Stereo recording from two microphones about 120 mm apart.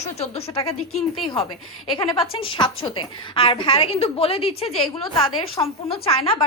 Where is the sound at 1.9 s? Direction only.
40° left (ahead or behind).